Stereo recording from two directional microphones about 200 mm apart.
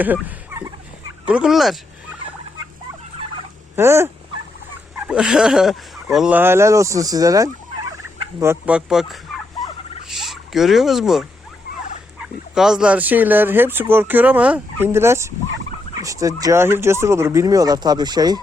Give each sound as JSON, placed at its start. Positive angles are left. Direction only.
{"t": 0.0, "sound": "speech", "side_deg": -10}
{"t": 3.8, "sound": "speech", "side_deg": -15}
{"t": 10.1, "sound": "turkey", "side_deg": 0}
{"t": 12.5, "sound": "speech", "side_deg": -5}